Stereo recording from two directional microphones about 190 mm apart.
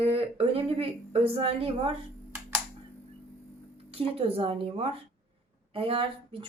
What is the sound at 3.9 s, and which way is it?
Speech, 30° right (ahead or behind).